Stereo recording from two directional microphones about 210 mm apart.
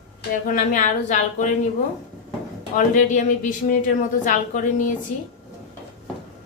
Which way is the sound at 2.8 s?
35° left (ahead or behind).